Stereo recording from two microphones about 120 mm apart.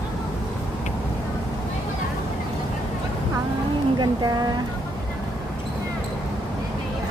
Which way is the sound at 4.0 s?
35° right (ahead or behind).